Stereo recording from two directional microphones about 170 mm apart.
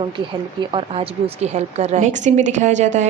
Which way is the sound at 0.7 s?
35° right (ahead or behind).